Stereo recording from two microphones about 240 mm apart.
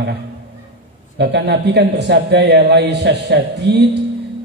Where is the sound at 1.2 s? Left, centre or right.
Right.